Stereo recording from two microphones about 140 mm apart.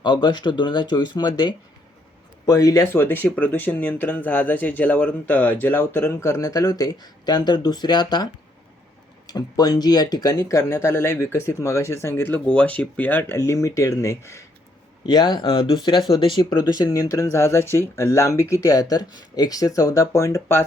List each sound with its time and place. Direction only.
0.0 s speech: 35° left (ahead or behind)
15.0 s speech: 30° left (ahead or behind)
16.5 s speech: 20° left (ahead or behind)